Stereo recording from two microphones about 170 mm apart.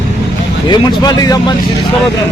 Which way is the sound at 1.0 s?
25° left (ahead or behind).